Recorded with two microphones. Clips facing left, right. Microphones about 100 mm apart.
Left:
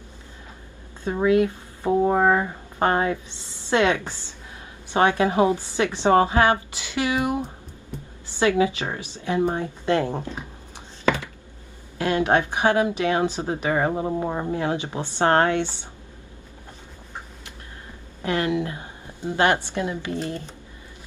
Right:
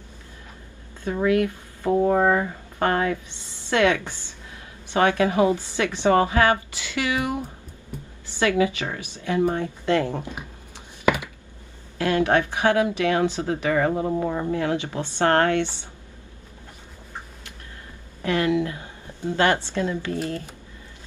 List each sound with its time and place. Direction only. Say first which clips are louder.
1.0 s speech: left 2 dB; 20° left (ahead or behind)
12.0 s speech: even; 20° left (ahead or behind)
18.2 s a woman's voice: right 2 dB; 20° left (ahead or behind)